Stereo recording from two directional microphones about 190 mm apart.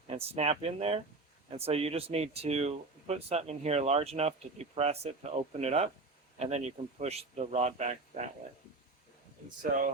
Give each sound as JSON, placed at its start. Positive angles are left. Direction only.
{"t": 0.1, "sound": "speech", "side_deg": -35}